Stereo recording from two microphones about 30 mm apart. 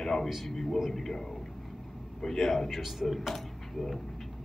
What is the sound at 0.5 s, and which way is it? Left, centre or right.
Speech, centre.